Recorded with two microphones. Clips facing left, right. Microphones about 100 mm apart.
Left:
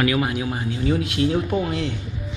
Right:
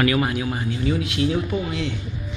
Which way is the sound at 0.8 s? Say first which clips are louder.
Left 2 dB; 35° left (ahead or behind).